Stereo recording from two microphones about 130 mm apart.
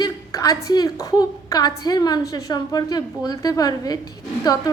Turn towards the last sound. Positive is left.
turn(degrees=30)  # may be behind; listen again after turning